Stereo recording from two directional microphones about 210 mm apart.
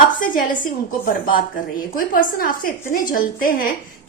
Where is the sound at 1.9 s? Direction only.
40° left (ahead or behind).